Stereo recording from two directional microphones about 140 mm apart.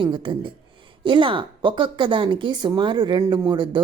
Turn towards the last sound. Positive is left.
turn(degrees=-30)  # may be behind; listen again after turning